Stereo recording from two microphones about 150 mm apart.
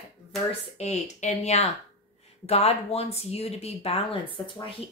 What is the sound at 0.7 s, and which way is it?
Speech, 50° left (ahead or behind).